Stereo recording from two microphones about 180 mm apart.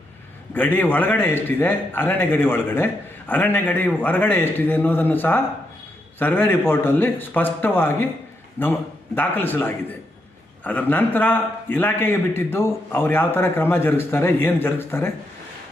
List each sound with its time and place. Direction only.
0.5 s a man's voice: 10° left (ahead or behind)